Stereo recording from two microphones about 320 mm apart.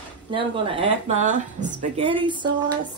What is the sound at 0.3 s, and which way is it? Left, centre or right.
Speech, centre.